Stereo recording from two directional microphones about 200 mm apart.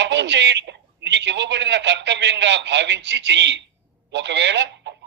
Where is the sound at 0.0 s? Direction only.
60° right (ahead or behind).